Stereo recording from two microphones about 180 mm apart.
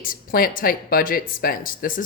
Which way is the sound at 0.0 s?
50° left (ahead or behind).